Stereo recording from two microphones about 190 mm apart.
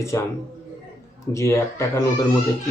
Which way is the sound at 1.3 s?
15° left (ahead or behind).